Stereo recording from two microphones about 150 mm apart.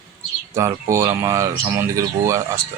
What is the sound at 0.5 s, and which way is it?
A man's voice, 20° right (ahead or behind).